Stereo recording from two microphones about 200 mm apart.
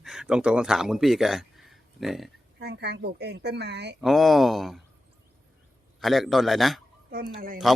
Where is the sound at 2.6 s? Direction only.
55° right (ahead or behind).